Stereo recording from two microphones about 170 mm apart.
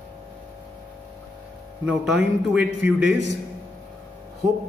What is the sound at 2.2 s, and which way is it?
Speech, 5° right (ahead or behind).